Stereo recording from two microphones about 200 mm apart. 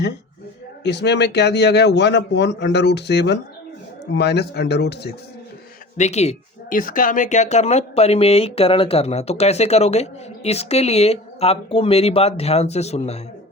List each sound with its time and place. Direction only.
0.9 s speech: 60° left (ahead or behind)
6.0 s speech: 35° left (ahead or behind)